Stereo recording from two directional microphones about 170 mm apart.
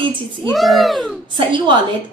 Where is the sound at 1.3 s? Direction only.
30° right (ahead or behind).